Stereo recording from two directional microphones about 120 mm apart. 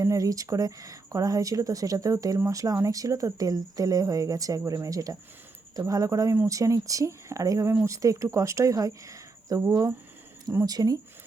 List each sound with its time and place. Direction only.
0.0 s speech: 30° right (ahead or behind)